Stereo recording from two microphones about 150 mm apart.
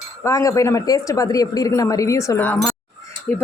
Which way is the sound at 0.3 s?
20° left (ahead or behind).